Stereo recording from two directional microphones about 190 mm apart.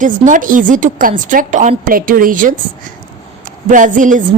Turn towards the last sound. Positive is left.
turn(degrees=-40)  # may be behind; listen again after turning